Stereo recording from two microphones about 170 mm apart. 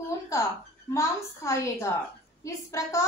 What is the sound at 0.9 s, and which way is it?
A woman's voice, 15° left (ahead or behind).